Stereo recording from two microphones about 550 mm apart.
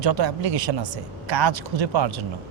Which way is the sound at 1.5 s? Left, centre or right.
Right.